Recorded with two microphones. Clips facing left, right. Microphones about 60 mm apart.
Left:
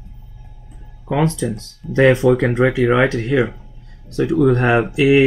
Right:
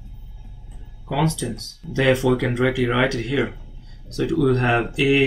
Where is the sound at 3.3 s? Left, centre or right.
Centre.